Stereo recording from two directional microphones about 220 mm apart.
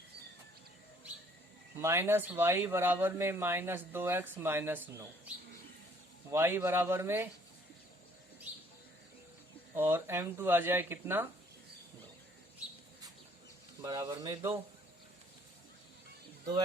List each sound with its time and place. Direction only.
1.8 s speech: 10° right (ahead or behind)
6.3 s speech: 10° right (ahead or behind)
8.5 s bird: 5° right (ahead or behind)
9.7 s speech: 10° right (ahead or behind)
13.8 s speech: 15° right (ahead or behind)